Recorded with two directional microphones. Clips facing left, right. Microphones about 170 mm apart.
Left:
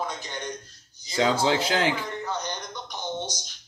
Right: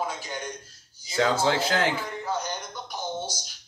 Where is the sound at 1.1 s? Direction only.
20° left (ahead or behind).